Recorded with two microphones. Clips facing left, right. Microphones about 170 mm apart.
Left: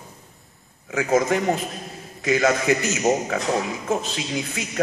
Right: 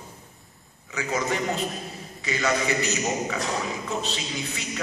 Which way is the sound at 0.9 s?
55° left (ahead or behind).